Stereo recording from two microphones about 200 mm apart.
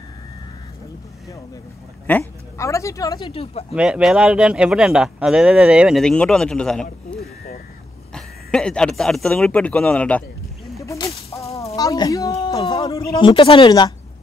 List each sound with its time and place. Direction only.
2.0 s speech: 10° left (ahead or behind); by 3.6 s 25° left (ahead or behind)
3.7 s speech: 5° right (ahead or behind)
10.8 s a sound: 15° left (ahead or behind)
11.7 s a child's voice: 20° left (ahead or behind)